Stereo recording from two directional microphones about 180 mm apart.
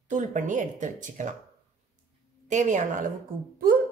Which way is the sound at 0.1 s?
45° right (ahead or behind).